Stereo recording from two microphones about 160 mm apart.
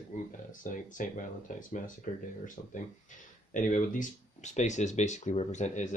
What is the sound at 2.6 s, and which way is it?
Speech, 45° left (ahead or behind).